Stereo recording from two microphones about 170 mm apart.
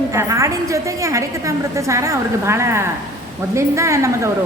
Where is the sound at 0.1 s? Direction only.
20° right (ahead or behind).